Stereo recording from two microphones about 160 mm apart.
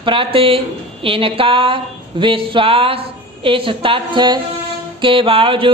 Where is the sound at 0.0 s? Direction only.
35° right (ahead or behind).